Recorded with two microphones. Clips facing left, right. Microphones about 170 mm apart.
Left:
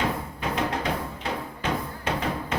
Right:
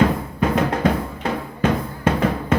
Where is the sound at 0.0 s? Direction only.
50° right (ahead or behind).